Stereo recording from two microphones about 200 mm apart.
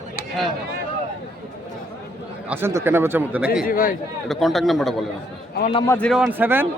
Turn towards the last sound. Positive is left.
turn(degrees=-10)  # may be behind; listen again after turning